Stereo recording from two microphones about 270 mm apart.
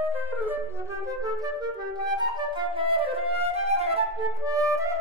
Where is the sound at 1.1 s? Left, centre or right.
Centre.